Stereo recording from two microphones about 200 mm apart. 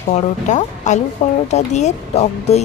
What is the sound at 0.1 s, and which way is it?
Speech, 35° left (ahead or behind).